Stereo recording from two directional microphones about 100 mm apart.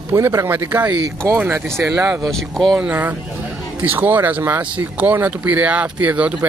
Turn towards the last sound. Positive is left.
turn(degrees=-15)  # may be behind; listen again after turning